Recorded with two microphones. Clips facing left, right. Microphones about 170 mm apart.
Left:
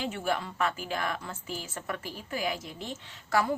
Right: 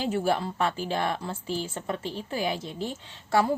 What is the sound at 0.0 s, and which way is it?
A woman's voice, 35° right (ahead or behind).